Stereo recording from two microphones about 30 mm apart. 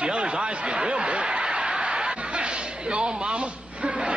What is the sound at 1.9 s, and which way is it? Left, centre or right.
Chuckle, right.